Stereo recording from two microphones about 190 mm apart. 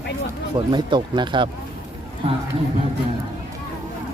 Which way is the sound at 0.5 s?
25° right (ahead or behind).